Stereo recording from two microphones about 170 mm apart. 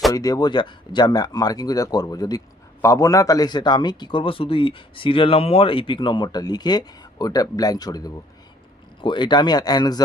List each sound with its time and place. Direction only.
0.1 s speech: 20° left (ahead or behind)